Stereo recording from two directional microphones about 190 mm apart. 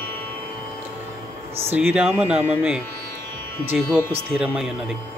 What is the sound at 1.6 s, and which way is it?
Speech, 10° right (ahead or behind).